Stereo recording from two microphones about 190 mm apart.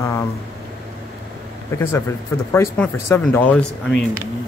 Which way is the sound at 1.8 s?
10° left (ahead or behind).